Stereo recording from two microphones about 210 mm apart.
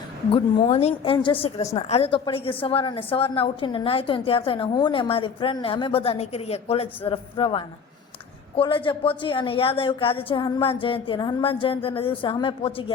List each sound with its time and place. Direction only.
0.3 s a woman's voice: 25° left (ahead or behind)